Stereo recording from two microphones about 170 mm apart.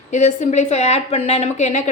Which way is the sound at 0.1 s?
45° left (ahead or behind).